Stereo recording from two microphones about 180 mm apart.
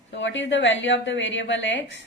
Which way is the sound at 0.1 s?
85° left.